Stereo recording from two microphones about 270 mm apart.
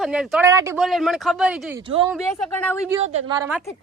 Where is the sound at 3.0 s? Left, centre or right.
Right.